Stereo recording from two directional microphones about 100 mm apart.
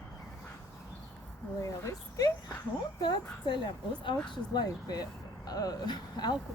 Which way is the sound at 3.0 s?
45° left (ahead or behind).